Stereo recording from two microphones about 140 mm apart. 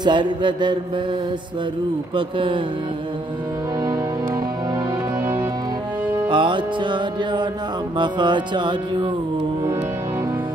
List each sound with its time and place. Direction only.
0.0 s music: 35° right (ahead or behind)
2.1 s music: 35° right (ahead or behind)
6.2 s music: 35° right (ahead or behind)